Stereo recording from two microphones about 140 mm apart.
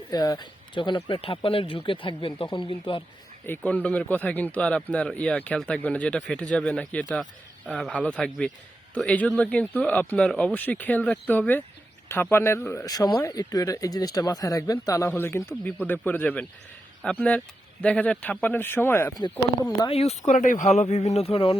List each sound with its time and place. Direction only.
0.1 s speech: 30° left (ahead or behind)
3.4 s speech: 10° left (ahead or behind)
19.9 s speech: 50° left (ahead or behind)
20.3 s speech: 70° left (ahead or behind); by 21.6 s 40° left (ahead or behind)